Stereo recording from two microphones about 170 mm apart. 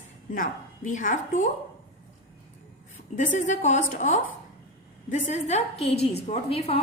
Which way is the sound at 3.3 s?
45° left (ahead or behind).